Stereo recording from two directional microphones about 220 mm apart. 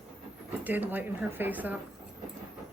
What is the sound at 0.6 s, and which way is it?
A woman's voice, 10° right (ahead or behind).